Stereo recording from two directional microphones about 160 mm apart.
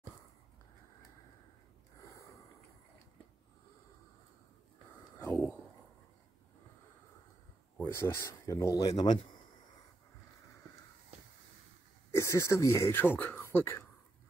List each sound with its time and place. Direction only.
7.8 s speech: 15° left (ahead or behind)
12.1 s speech: 20° left (ahead or behind)